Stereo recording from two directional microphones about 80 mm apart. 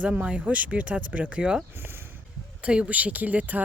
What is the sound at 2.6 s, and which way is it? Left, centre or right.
Speech, centre.